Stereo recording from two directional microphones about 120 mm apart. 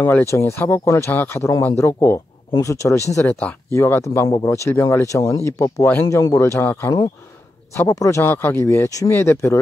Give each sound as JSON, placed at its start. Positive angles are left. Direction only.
{"t": 0.0, "sound": "speech", "side_deg": 20}